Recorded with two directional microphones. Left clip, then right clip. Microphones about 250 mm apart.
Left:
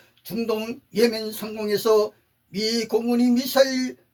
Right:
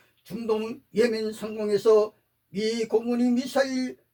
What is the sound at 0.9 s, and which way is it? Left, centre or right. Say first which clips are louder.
Speech: left 2 dB; left.